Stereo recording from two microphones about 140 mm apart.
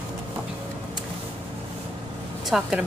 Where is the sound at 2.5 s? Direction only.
5° right (ahead or behind).